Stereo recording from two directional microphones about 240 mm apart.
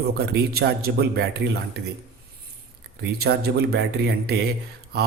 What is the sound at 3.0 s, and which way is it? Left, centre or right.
Speech, right.